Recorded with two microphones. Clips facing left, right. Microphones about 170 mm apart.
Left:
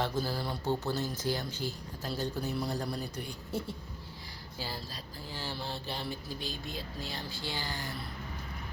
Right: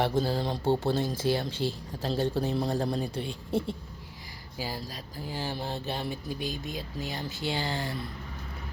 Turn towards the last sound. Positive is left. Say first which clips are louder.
# right 7 dB
turn(degrees=-25)  # may be behind; listen again after turning